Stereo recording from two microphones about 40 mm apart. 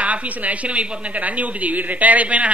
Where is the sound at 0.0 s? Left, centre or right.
Right.